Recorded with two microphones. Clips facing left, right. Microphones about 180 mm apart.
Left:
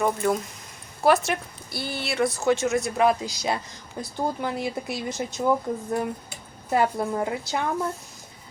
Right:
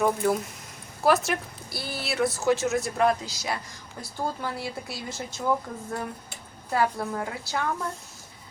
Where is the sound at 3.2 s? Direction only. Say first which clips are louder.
Left 5 dB; 20° left (ahead or behind).